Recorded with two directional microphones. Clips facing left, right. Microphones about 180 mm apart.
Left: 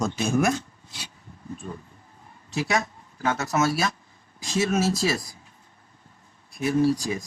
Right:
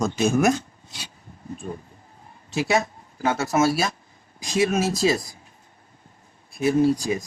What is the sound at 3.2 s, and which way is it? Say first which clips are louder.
Speech: right 3 dB; 30° right (ahead or behind).